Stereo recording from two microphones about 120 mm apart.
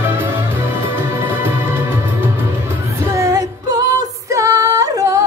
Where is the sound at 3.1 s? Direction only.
25° right (ahead or behind).